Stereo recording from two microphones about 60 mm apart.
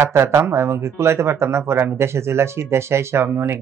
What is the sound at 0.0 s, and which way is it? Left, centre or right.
Speech, right.